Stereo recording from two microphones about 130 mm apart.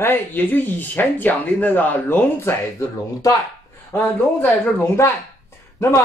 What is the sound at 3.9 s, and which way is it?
Speech, 10° left (ahead or behind).